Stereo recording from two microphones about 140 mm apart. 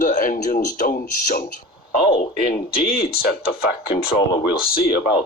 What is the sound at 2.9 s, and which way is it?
Speech, 90° left.